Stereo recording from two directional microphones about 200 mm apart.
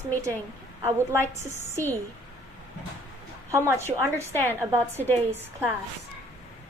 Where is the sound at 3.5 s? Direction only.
15° right (ahead or behind).